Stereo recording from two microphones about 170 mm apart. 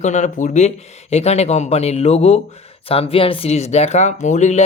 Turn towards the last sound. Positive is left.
turn(degrees=45)  # may be behind; listen again after turning